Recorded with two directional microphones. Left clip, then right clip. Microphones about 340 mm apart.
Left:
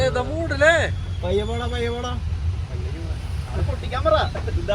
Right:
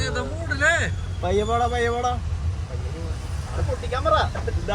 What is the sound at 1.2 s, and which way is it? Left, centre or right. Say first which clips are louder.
Speech: right 3 dB; right.